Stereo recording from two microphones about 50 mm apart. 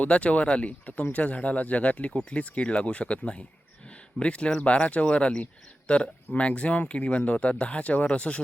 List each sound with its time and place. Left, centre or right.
0.0 s speech: left